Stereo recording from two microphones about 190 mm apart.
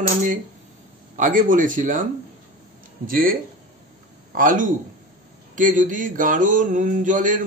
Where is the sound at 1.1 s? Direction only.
45° right (ahead or behind).